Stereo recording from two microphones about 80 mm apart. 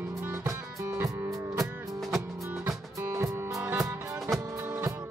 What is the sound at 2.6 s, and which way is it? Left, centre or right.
Music, right.